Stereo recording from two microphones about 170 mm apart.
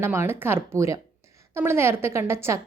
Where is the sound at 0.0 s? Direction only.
15° right (ahead or behind).